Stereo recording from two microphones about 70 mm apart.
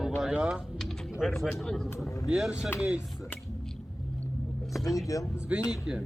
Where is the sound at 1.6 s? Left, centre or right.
Centre.